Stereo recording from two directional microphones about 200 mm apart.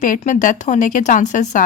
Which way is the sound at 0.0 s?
40° left (ahead or behind).